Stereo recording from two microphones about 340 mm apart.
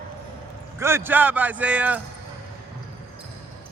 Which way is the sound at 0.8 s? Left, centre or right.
Centre.